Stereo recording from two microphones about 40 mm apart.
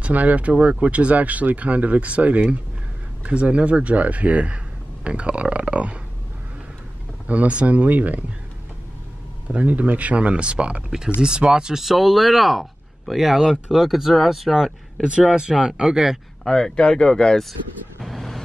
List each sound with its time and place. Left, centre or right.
0.0 s speech: right
7.2 s speech: right
9.5 s speech: right; by 11.8 s centre
11.8 s speech: centre
16.4 s speech: centre
18.0 s vehicle: centre